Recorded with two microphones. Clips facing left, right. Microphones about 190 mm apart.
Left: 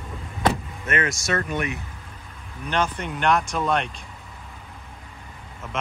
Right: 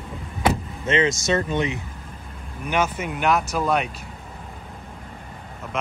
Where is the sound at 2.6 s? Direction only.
5° right (ahead or behind).